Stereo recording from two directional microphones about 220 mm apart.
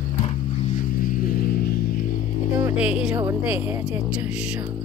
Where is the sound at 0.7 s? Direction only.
40° left (ahead or behind).